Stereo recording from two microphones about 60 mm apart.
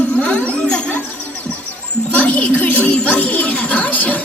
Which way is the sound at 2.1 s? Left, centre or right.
Left.